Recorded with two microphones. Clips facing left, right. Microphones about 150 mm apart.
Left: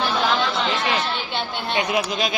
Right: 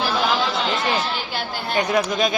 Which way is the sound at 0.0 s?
Centre (ahead or behind).